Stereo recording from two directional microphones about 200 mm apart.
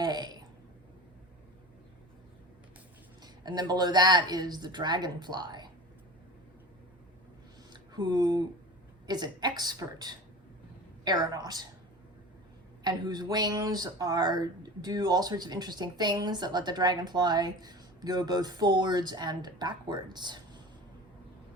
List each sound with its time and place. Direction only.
0.0 s a sound: 20° right (ahead or behind)
3.2 s speech: 20° right (ahead or behind)
7.7 s speech: 20° right (ahead or behind)
12.8 s speech: 20° right (ahead or behind)